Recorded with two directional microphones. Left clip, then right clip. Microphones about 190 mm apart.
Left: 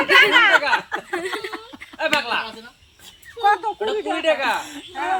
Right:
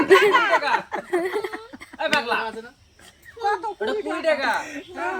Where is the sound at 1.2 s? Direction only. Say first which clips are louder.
Right 1 dB; 15° right (ahead or behind).